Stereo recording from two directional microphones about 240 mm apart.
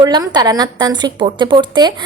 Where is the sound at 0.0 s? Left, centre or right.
Centre.